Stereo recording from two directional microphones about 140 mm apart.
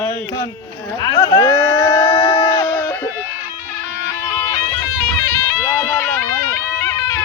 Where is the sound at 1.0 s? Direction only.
30° left (ahead or behind).